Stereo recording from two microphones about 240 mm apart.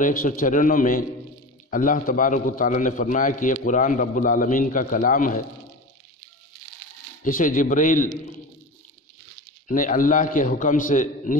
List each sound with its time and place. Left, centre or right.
0.0 s a man's voice: left
7.2 s a man's voice: left
9.7 s a man's voice: left